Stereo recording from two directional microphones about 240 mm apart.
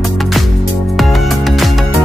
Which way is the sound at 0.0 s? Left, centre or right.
Centre.